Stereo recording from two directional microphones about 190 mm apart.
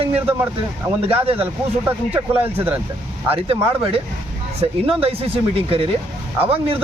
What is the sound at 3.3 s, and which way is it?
Speech, 30° right (ahead or behind).